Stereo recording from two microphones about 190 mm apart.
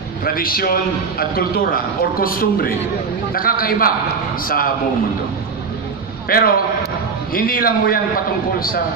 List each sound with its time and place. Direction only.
0.2 s a man's voice: 50° left (ahead or behind)
6.2 s a man's voice: 50° left (ahead or behind)